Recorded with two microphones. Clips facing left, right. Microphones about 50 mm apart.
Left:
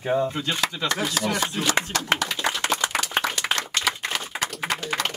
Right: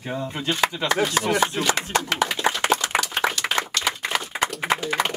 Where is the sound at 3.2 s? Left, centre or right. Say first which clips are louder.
Right 1 dB; centre.